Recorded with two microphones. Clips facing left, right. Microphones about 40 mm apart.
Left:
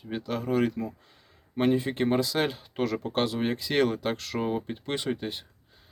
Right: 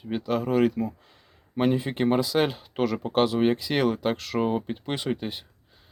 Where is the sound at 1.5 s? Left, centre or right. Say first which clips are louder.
Right 1 dB; centre.